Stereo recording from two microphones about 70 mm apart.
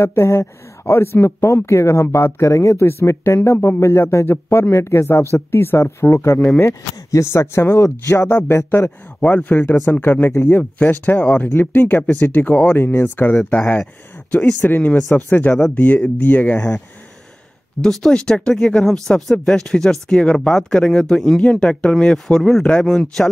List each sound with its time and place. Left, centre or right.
0.0 s speech: left; by 12.7 s centre
12.7 s speech: left
17.8 s speech: centre